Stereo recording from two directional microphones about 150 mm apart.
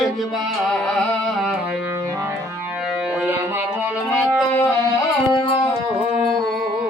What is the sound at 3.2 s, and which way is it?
Music, 15° right (ahead or behind).